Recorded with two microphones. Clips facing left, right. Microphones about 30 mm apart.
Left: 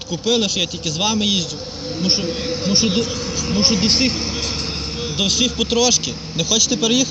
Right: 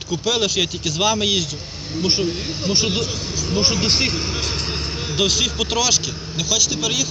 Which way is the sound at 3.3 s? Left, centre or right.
Left.